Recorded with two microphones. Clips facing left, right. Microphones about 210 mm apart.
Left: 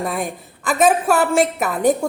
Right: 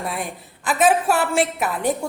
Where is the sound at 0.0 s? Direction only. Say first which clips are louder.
Left 4 dB; 45° left (ahead or behind).